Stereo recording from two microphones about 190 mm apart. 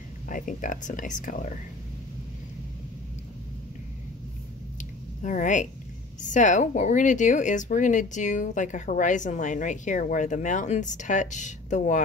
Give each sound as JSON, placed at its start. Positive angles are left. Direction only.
{"t": 0.3, "sound": "speech", "side_deg": 45}
{"t": 5.2, "sound": "a woman's voice", "side_deg": 40}